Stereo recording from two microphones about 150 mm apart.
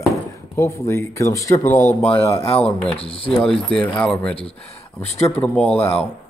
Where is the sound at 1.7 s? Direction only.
55° left (ahead or behind).